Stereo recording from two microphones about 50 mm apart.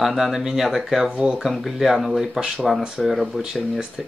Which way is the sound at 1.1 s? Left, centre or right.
Centre.